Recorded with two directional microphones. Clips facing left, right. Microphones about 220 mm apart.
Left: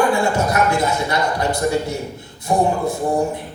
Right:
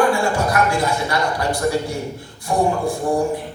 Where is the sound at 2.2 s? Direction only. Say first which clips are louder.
Left 2 dB; 20° left (ahead or behind).